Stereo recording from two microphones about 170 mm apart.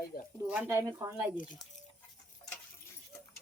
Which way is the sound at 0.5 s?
10° right (ahead or behind).